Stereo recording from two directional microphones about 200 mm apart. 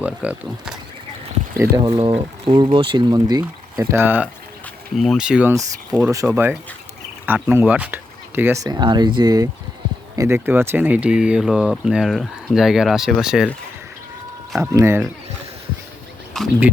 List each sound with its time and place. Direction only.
0.0 s speech: 5° right (ahead or behind)
1.5 s speech: 15° right (ahead or behind)
14.6 s speech: 15° right (ahead or behind)
16.3 s speech: 5° right (ahead or behind)